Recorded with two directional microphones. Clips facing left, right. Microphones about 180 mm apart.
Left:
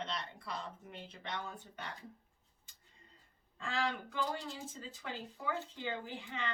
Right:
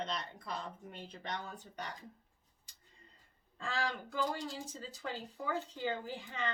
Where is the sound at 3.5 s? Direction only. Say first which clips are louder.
Left 1 dB; 35° right (ahead or behind).